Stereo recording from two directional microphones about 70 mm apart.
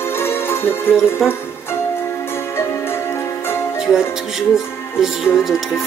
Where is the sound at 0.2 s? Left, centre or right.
Left.